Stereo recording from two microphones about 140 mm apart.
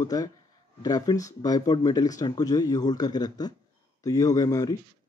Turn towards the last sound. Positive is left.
turn(degrees=25)  # may be behind; listen again after turning